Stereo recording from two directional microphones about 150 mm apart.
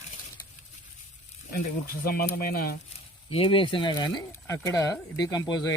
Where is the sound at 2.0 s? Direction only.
75° left (ahead or behind).